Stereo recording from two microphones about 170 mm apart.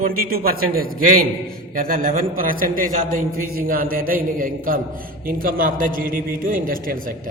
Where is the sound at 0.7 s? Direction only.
60° right (ahead or behind).